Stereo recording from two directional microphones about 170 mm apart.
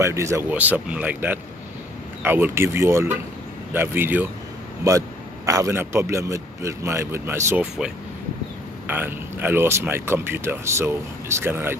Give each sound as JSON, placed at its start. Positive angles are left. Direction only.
{"t": 0.0, "sound": "speech", "side_deg": -15}
{"t": 8.8, "sound": "speech", "side_deg": -10}